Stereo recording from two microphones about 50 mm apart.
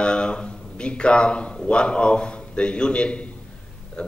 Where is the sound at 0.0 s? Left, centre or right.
Centre.